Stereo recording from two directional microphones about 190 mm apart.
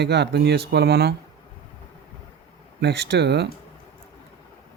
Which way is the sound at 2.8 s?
60° right (ahead or behind).